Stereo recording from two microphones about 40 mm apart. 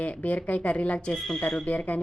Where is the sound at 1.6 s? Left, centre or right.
Left.